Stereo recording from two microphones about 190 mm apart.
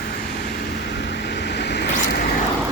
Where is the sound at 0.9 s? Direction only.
60° left (ahead or behind).